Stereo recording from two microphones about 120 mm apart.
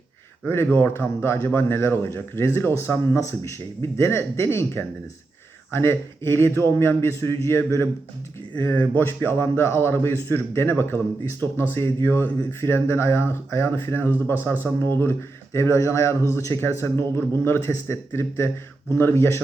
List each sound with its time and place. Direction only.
0.4 s a man's voice: 20° left (ahead or behind)